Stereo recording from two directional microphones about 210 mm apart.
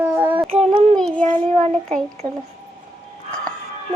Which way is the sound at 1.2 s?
35° right (ahead or behind).